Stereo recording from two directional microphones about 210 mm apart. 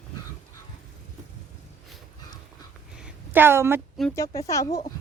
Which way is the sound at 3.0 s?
10° right (ahead or behind).